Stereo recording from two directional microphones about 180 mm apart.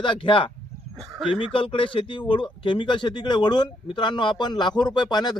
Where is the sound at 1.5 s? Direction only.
30° left (ahead or behind).